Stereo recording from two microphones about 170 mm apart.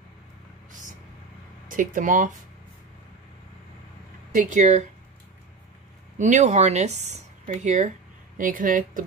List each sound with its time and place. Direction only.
0.7 s vehicle: 50° right (ahead or behind)
1.7 s speech: 50° right (ahead or behind)
4.3 s speech: 50° right (ahead or behind)
6.1 s speech: 45° right (ahead or behind)